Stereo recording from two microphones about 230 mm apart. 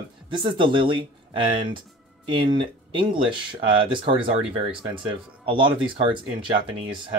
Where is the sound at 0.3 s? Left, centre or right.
Right.